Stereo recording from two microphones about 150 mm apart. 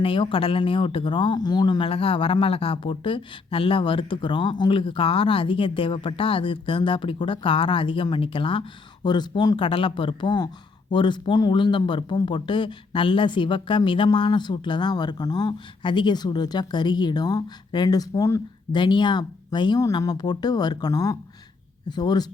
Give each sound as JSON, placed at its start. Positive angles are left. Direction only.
{"t": 0.0, "sound": "speech", "side_deg": 35}